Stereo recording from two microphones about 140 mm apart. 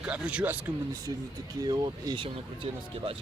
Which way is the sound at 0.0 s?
5° right (ahead or behind).